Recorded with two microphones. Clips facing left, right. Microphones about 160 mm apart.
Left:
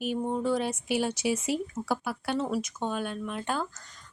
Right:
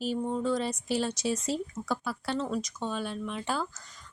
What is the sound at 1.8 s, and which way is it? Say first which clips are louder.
Speech: left 3 dB; 30° left (ahead or behind).